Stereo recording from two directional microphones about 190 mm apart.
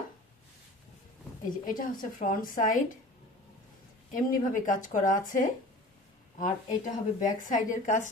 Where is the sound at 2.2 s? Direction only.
45° left (ahead or behind).